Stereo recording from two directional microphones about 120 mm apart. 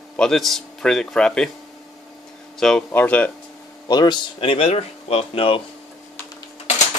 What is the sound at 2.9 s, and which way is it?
Speech, 15° left (ahead or behind).